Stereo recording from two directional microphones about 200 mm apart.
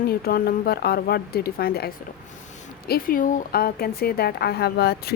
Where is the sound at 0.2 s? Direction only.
50° left (ahead or behind).